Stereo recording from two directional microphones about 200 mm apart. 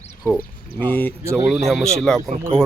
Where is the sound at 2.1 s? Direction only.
5° left (ahead or behind).